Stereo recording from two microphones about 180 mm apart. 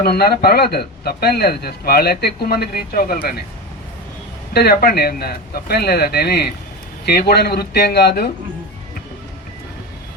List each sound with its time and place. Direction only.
0.0 s a man's voice: 60° left (ahead or behind)
4.5 s a man's voice: 60° left (ahead or behind)